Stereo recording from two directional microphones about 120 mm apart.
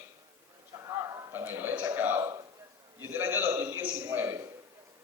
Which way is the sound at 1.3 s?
20° right (ahead or behind).